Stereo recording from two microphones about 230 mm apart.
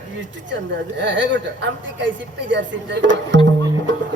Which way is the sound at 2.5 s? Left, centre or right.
Right.